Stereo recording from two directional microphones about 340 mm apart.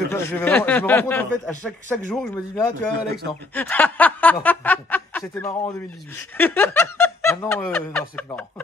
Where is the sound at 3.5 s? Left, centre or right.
Centre.